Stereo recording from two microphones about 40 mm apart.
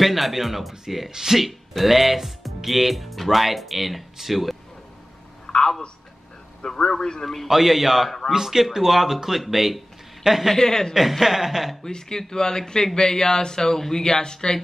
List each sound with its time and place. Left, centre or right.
0.0 s speech: centre
5.5 s a sound: centre
6.6 s speech: centre
7.4 s speech: centre
10.5 s speech: centre
11.0 s speech: centre
11.9 s speech: centre